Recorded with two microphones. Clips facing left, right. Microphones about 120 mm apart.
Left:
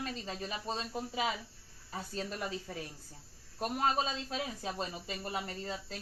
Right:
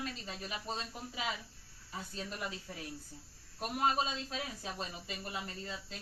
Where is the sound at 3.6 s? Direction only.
35° left (ahead or behind).